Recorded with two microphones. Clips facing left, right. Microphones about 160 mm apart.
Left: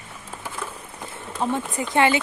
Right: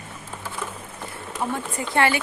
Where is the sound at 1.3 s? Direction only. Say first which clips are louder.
Left 3 dB; 20° left (ahead or behind).